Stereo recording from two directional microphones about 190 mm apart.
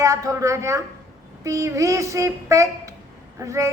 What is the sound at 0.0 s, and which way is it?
A child's voice, 15° right (ahead or behind).